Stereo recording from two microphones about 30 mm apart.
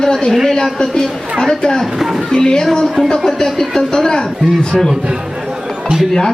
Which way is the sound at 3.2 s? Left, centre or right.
Centre.